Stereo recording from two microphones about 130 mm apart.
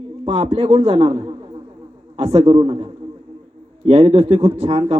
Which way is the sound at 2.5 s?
40° right (ahead or behind).